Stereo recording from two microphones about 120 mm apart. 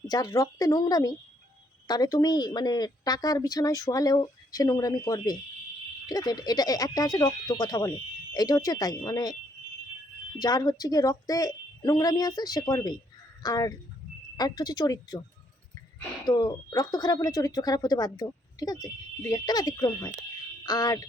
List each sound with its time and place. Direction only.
0.1 s speech: 30° left (ahead or behind)
16.2 s speech: 35° left (ahead or behind)